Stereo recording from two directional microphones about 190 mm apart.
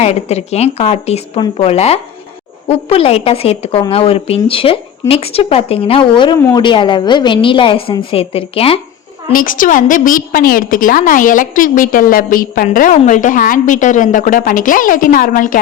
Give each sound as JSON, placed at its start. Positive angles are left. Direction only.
{"t": 0.0, "sound": "a woman's voice", "side_deg": 35}
{"t": 9.3, "sound": "a woman's voice", "side_deg": 45}